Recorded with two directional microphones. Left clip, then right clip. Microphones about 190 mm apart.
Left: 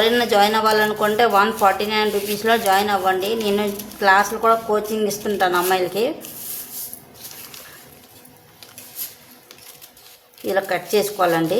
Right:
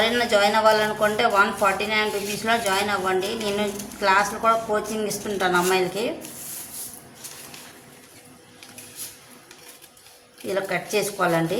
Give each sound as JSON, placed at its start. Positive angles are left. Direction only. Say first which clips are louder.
{"t": 0.0, "sound": "speech", "louder": "left 4 dB", "side_deg": 50}
{"t": 10.5, "sound": "speech", "louder": "left 5 dB", "side_deg": 45}